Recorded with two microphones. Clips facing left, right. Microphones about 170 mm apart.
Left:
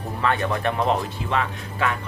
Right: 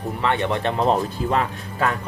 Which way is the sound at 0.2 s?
20° right (ahead or behind).